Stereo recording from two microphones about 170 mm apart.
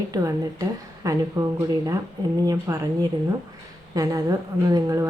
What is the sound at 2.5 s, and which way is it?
Speech, 20° right (ahead or behind).